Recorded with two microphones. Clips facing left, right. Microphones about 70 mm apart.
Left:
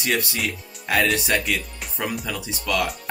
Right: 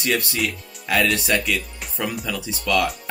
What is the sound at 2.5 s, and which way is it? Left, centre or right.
Speech, left.